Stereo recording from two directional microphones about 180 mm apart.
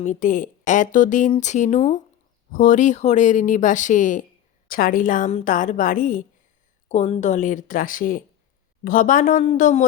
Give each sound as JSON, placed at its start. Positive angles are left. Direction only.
{"t": 0.0, "sound": "speech", "side_deg": 45}